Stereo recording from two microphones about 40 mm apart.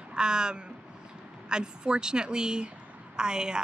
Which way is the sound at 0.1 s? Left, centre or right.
Right.